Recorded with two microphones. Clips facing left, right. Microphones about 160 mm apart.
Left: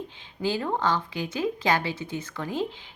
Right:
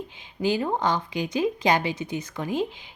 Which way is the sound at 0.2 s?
15° right (ahead or behind).